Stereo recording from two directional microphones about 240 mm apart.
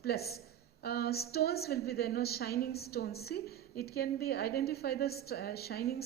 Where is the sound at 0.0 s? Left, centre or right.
Left.